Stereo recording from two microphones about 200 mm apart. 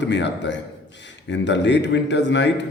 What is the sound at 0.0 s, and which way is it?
Speech, 60° left (ahead or behind).